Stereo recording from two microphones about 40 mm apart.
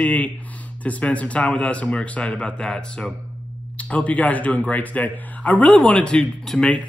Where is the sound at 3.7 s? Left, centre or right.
Left.